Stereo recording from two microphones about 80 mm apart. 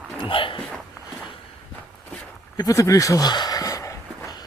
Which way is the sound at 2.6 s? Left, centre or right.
Left.